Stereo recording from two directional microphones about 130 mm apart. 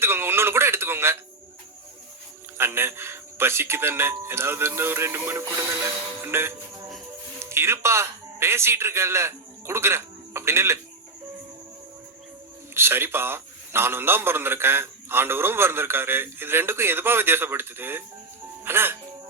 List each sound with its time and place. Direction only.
0.0 s music: 20° right (ahead or behind)
2.6 s a man's voice: 20° right (ahead or behind)
12.7 s a man's voice: 20° right (ahead or behind)